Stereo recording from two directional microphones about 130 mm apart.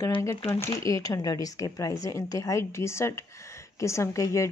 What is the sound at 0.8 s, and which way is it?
A woman's voice, 25° left (ahead or behind).